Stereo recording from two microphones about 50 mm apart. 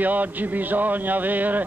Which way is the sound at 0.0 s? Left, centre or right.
Right.